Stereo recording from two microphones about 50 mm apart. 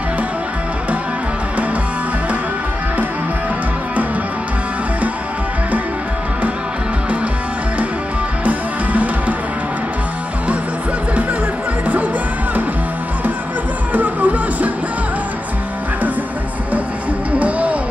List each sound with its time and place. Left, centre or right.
8.5 s music: right
11.8 s music: right
13.9 s music: right
17.4 s music: right